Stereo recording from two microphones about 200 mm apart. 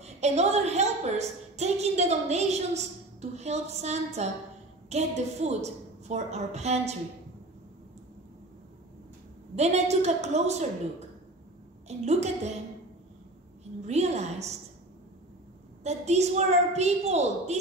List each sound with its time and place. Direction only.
0.0 s a woman's voice: 35° right (ahead or behind)
9.6 s a woman's voice: 35° right (ahead or behind)
13.8 s a woman's voice: 35° right (ahead or behind)
15.8 s a woman's voice: 35° right (ahead or behind)